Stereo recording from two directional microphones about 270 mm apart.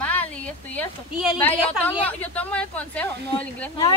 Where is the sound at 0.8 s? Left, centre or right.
Centre.